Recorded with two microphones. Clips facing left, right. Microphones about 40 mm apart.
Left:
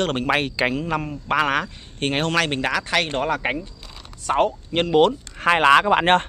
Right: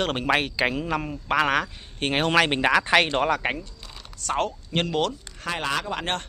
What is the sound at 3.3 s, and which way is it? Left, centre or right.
Speech, centre.